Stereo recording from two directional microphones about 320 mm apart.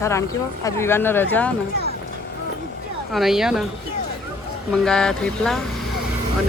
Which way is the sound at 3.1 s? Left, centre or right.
Centre.